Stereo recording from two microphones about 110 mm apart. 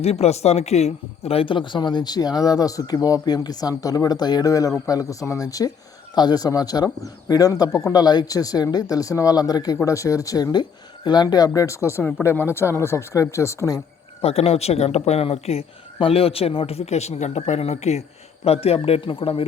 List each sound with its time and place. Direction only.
0.0 s a man's voice: 70° left (ahead or behind); by 13.8 s 30° left (ahead or behind)
14.2 s speech: 65° left (ahead or behind); by 18.0 s 85° left
18.4 s a man's voice: 65° left (ahead or behind)